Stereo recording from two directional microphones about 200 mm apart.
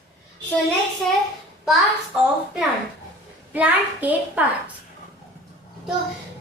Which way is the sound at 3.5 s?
5° right (ahead or behind).